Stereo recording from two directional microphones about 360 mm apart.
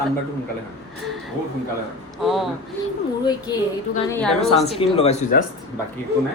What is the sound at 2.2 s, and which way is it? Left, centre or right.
Speech, centre.